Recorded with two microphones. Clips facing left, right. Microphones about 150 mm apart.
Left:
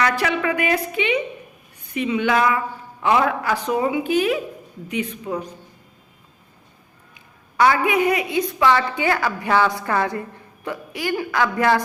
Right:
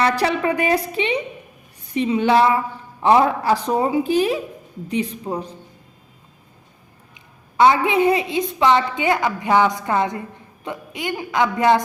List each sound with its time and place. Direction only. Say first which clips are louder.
0.0 s a woman's voice: right 2 dB; 30° right (ahead or behind)
7.1 s a woman's voice: right 1 dB; 20° right (ahead or behind)